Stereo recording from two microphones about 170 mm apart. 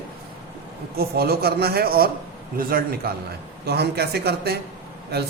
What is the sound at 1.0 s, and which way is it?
Speech, 65° right (ahead or behind).